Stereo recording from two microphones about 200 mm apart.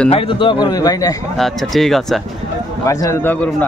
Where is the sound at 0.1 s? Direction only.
25° left (ahead or behind).